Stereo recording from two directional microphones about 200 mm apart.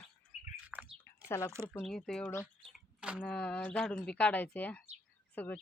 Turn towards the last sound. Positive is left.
turn(degrees=5)  # may be behind; listen again after turning